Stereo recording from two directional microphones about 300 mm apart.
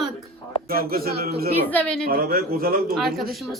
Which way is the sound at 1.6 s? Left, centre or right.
Centre.